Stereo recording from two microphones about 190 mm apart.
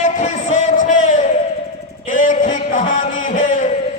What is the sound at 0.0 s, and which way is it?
Music, 40° left (ahead or behind).